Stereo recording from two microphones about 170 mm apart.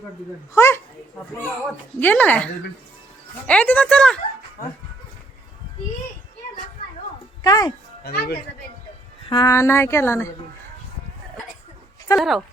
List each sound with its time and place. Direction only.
0.5 s speech: 15° left (ahead or behind)
2.0 s speech: 10° left (ahead or behind)
7.4 s speech: 20° left (ahead or behind)
8.0 s speech: 65° left (ahead or behind)
9.3 s speech: 20° left (ahead or behind)
12.1 s speech: centre (ahead or behind)